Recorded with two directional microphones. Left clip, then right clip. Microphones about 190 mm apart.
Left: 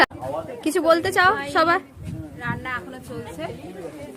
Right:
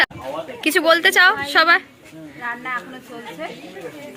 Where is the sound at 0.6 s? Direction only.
10° left (ahead or behind).